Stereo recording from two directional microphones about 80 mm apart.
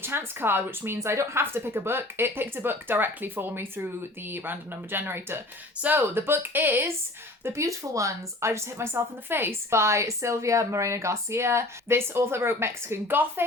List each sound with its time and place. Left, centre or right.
0.0 s a woman's voice: right
0.9 s a woman's voice: right
7.4 s speech: right